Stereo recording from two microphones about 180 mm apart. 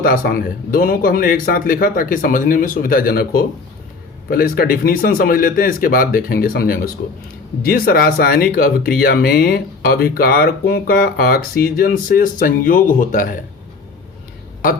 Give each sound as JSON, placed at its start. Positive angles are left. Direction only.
{"t": 0.0, "sound": "speech", "side_deg": 55}